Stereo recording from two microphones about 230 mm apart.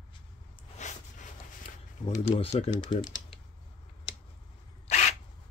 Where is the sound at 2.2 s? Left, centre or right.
Left.